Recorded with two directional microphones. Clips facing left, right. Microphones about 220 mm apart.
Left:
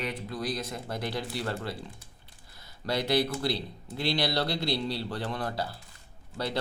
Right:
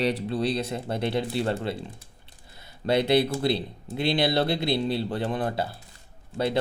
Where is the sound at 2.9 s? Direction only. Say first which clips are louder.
Right 6 dB; 25° right (ahead or behind).